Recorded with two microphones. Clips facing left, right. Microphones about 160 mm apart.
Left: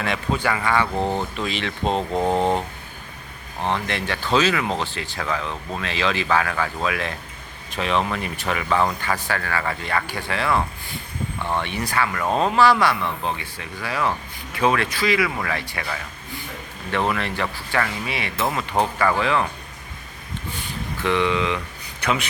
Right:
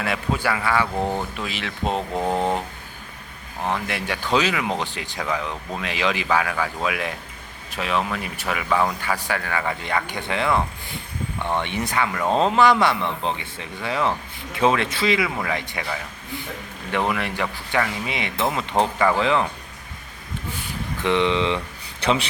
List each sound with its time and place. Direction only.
0.0 s speech: 5° right (ahead or behind)
16.9 s speech: 10° right (ahead or behind)
21.0 s a man's voice: 20° right (ahead or behind)